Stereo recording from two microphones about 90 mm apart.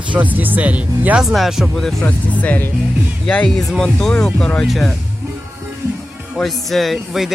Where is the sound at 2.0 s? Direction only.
15° left (ahead or behind).